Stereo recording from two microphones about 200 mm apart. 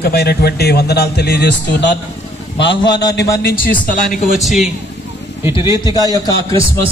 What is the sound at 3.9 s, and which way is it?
Speech, 40° left (ahead or behind).